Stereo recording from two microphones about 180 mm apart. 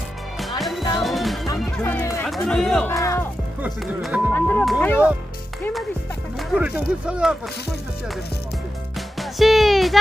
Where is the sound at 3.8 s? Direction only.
Centre (ahead or behind).